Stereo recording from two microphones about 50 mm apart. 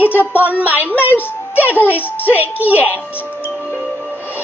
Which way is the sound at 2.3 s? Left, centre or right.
Right.